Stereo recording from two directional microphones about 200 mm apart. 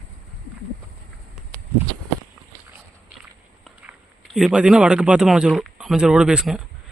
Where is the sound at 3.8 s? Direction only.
Centre (ahead or behind).